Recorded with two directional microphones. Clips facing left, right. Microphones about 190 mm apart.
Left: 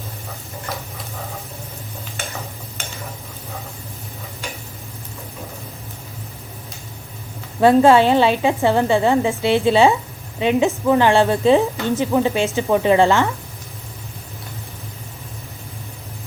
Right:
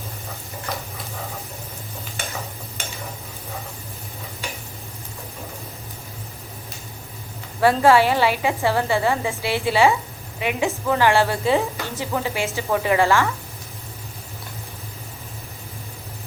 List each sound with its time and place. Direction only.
7.6 s a woman's voice: 20° left (ahead or behind)